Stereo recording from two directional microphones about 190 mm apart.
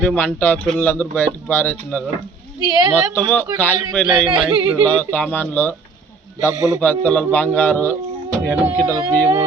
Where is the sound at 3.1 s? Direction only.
5° left (ahead or behind).